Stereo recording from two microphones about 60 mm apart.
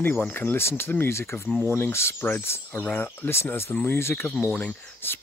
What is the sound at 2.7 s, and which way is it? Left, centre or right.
Speech, left.